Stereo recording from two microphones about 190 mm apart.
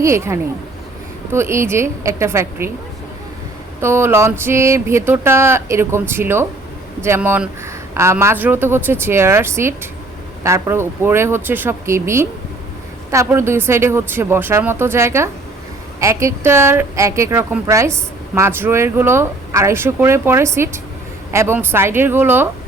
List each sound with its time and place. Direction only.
0.0 s speech: 15° right (ahead or behind)
3.8 s speech: 15° right (ahead or behind)